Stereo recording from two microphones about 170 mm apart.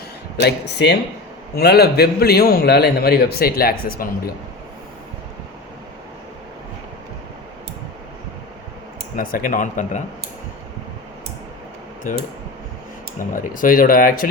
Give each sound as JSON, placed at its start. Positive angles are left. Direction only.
{"t": 0.3, "sound": "speech", "side_deg": 80}
{"t": 1.5, "sound": "a man's voice", "side_deg": 70}
{"t": 9.1, "sound": "speech", "side_deg": 55}
{"t": 13.1, "sound": "speech", "side_deg": 50}